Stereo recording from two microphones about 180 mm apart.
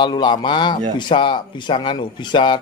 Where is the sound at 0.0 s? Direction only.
25° left (ahead or behind).